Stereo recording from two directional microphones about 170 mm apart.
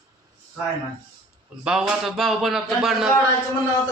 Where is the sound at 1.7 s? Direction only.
5° right (ahead or behind).